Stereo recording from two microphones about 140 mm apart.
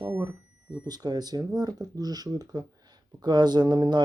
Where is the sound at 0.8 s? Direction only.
30° right (ahead or behind).